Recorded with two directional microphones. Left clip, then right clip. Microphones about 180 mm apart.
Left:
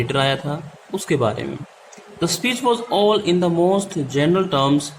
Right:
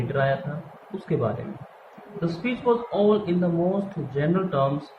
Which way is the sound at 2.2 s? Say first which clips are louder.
Left 5 dB; 50° left (ahead or behind).